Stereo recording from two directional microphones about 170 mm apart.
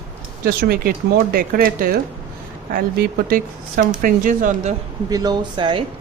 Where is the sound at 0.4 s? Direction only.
60° right (ahead or behind).